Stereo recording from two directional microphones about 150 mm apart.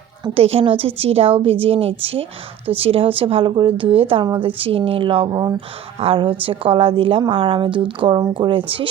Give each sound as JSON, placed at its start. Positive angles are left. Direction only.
{"t": 0.3, "sound": "speech", "side_deg": -40}